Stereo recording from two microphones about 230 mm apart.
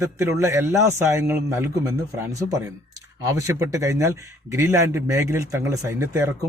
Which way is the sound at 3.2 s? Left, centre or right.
Centre.